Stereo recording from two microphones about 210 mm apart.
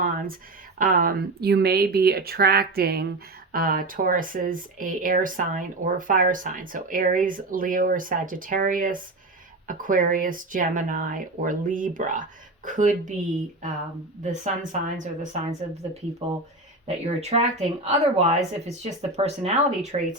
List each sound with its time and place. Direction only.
0.0 s a sound: 40° right (ahead or behind)
0.8 s speech: 40° right (ahead or behind)
14.2 s speech: 35° right (ahead or behind)